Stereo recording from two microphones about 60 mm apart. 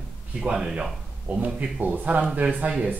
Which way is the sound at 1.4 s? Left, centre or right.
Right.